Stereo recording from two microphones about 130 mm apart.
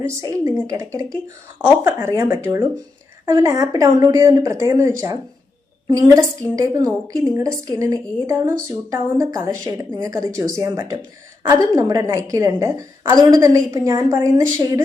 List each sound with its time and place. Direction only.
0.0 s a woman's voice: 25° right (ahead or behind)